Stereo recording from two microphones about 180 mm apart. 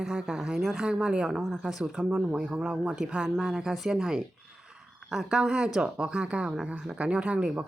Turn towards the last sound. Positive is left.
turn(degrees=-5)  # may be behind; listen again after turning